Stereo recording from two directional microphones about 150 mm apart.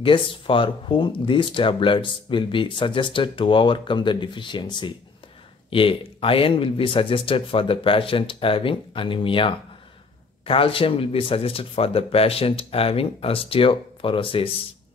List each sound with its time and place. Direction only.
0.0 s speech: 35° left (ahead or behind)